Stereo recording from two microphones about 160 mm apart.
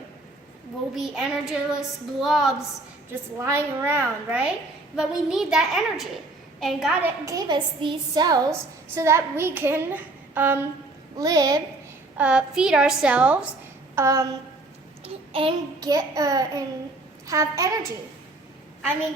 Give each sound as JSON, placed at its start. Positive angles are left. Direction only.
{"t": 0.9, "sound": "child singing", "side_deg": -5}
{"t": 3.4, "sound": "a woman's voice", "side_deg": -15}
{"t": 4.9, "sound": "child singing", "side_deg": -5}
{"t": 7.0, "sound": "a woman's voice", "side_deg": -25}
{"t": 12.1, "sound": "a woman's voice", "side_deg": -5}
{"t": 13.9, "sound": "a sound", "side_deg": -20}
{"t": 15.0, "sound": "a sound", "side_deg": -35}
{"t": 17.2, "sound": "a woman's voice", "side_deg": -20}